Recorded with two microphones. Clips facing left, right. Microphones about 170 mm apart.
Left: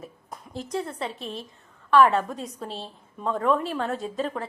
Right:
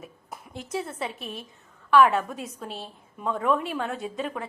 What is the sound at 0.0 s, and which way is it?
A woman's voice, centre (ahead or behind).